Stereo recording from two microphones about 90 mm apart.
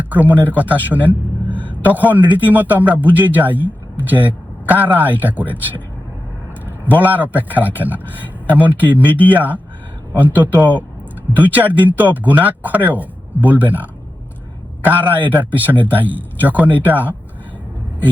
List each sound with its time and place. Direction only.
0.0 s a man's voice: 20° right (ahead or behind)
6.8 s a man's voice: 20° right (ahead or behind)